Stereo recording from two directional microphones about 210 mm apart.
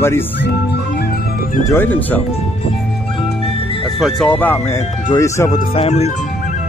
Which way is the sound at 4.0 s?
Centre (ahead or behind).